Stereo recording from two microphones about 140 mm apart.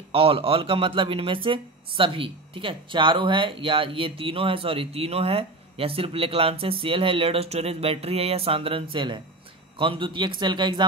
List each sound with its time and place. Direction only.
0.1 s speech: 40° right (ahead or behind)